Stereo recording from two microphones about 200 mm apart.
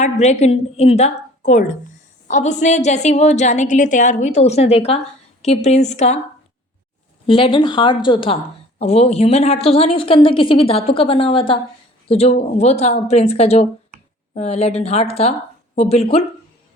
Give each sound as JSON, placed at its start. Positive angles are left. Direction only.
{"t": 0.0, "sound": "a woman's voice", "side_deg": 35}
{"t": 7.3, "sound": "a woman's voice", "side_deg": 25}